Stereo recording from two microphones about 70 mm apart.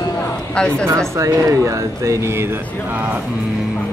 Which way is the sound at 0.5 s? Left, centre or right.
Centre.